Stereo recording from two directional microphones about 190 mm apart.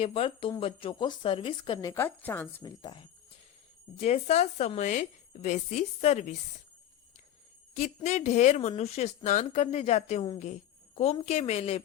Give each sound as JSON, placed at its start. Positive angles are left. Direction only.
{"t": 0.0, "sound": "speech", "side_deg": 30}
{"t": 3.9, "sound": "a woman's voice", "side_deg": 35}
{"t": 8.0, "sound": "a woman's voice", "side_deg": 35}